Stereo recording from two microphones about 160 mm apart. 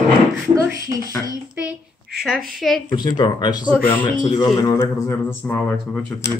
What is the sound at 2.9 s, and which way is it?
Speech, 25° left (ahead or behind).